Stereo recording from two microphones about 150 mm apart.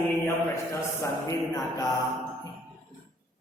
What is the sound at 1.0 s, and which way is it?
Speech, 20° left (ahead or behind).